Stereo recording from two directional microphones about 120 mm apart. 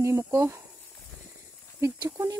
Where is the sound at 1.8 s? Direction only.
25° right (ahead or behind).